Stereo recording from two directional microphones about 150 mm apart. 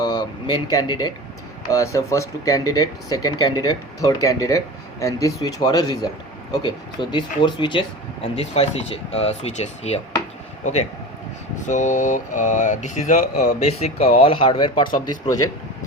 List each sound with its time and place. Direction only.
0.0 s a sound: 30° left (ahead or behind)
1.7 s speech: 20° left (ahead or behind)
8.6 s speech: 45° left (ahead or behind)
13.6 s speech: 45° left (ahead or behind)
14.9 s speech: 25° left (ahead or behind)